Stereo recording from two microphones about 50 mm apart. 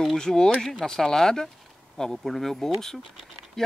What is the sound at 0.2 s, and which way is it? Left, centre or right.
Speech, centre.